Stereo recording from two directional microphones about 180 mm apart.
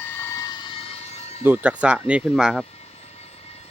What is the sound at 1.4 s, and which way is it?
Speech, 10° right (ahead or behind).